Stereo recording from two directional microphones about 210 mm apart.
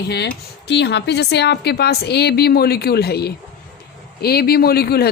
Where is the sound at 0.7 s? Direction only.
55° left (ahead or behind).